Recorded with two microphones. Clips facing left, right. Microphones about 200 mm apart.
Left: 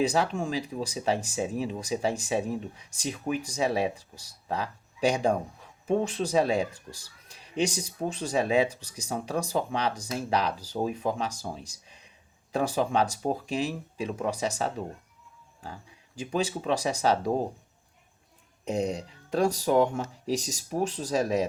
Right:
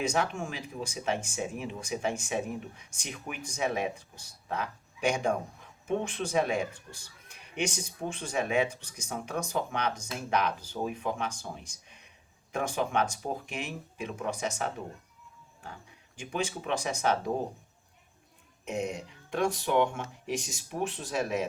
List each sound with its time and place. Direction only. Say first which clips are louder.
0.0 s speech: left 4 dB; 35° left (ahead or behind)
18.6 s speech: left 4 dB; 35° left (ahead or behind)